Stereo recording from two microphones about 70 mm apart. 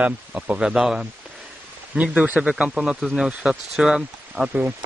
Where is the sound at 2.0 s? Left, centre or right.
Centre.